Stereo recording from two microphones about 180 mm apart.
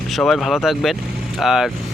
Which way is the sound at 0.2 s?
Centre (ahead or behind).